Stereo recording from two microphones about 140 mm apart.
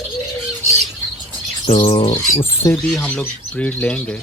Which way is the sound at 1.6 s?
35° left (ahead or behind).